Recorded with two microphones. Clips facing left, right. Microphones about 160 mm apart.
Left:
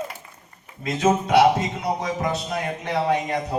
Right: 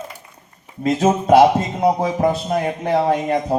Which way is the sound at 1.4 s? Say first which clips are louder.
Right 4 dB; 55° right (ahead or behind).